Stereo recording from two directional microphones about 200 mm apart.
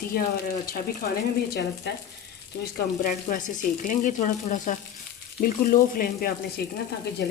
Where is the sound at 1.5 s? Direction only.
60° left (ahead or behind).